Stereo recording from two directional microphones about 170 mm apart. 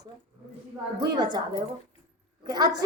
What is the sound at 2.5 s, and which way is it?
Speech, 25° right (ahead or behind).